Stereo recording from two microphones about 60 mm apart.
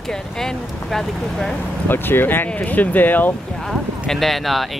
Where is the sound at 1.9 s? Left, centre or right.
Left.